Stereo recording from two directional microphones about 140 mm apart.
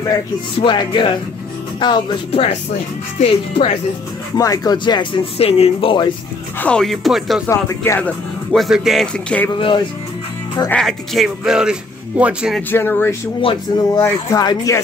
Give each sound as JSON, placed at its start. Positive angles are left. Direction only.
{"t": 0.6, "sound": "speech", "side_deg": 35}
{"t": 3.2, "sound": "speech", "side_deg": 50}
{"t": 4.4, "sound": "speech", "side_deg": 25}
{"t": 6.6, "sound": "speech", "side_deg": 5}
{"t": 7.4, "sound": "speech", "side_deg": 20}
{"t": 8.5, "sound": "speech", "side_deg": 0}
{"t": 9.5, "sound": "speech", "side_deg": 35}
{"t": 10.7, "sound": "speech", "side_deg": 5}
{"t": 12.7, "sound": "speech", "side_deg": 15}
{"t": 13.4, "sound": "speech", "side_deg": 40}
{"t": 13.9, "sound": "speech", "side_deg": 15}
{"t": 14.4, "sound": "speech", "side_deg": 25}